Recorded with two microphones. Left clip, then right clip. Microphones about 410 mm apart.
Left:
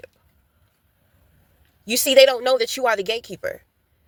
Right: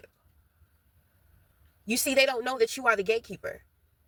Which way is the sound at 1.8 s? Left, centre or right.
Left.